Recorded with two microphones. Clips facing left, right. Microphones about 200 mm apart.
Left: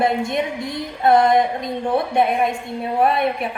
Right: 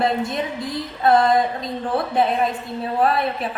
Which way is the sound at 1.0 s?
25° left (ahead or behind).